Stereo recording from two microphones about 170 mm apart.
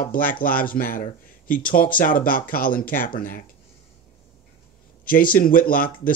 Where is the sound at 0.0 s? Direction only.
55° left (ahead or behind).